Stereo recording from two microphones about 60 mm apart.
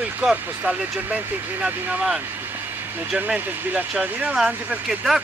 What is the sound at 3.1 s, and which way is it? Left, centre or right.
Speech, right.